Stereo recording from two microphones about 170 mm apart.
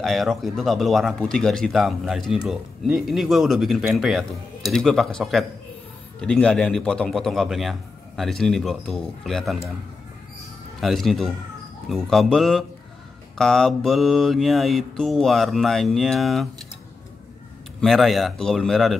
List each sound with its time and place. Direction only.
0.0 s speech: centre (ahead or behind)
10.8 s speech: centre (ahead or behind)
17.7 s speech: centre (ahead or behind)